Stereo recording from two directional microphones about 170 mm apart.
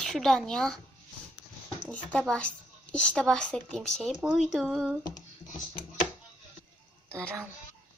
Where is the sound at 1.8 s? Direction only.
5° left (ahead or behind).